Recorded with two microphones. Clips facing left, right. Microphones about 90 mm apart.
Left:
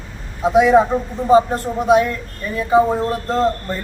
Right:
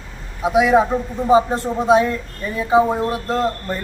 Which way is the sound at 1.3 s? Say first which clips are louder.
Left 2 dB; 15° right (ahead or behind).